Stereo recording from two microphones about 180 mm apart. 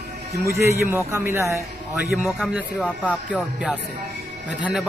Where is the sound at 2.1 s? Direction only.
Centre (ahead or behind).